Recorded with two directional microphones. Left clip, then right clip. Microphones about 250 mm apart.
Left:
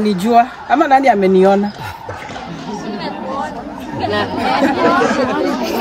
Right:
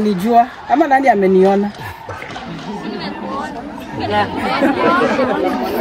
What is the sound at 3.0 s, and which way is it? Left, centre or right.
Chatter, left.